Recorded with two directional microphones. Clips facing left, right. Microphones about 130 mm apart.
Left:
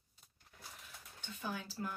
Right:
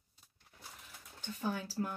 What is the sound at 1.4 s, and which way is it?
Speech, 40° right (ahead or behind).